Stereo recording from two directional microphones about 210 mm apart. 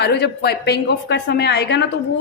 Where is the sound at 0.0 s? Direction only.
50° left (ahead or behind).